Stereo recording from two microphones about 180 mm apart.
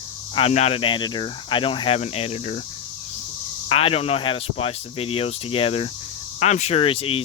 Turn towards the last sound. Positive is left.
turn(degrees=30)  # may be behind; listen again after turning